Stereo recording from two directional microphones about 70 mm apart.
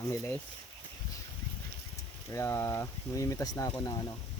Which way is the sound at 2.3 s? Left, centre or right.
Left.